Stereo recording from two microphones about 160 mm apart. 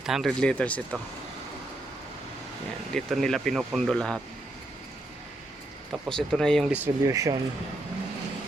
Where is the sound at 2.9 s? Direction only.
5° left (ahead or behind).